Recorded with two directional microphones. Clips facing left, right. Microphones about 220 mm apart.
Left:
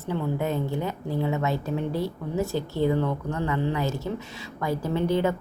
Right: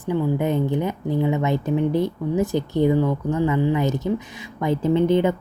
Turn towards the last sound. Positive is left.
turn(degrees=-20)  # may be behind; listen again after turning